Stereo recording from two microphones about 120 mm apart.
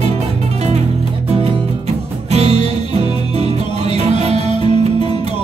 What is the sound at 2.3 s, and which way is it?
Music, 65° right (ahead or behind).